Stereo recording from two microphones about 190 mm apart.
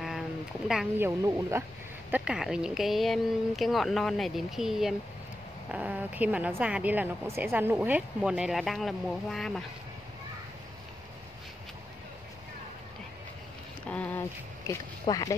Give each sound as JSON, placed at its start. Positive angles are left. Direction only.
{"t": 0.7, "sound": "a woman's voice", "side_deg": -5}
{"t": 13.8, "sound": "speech", "side_deg": 5}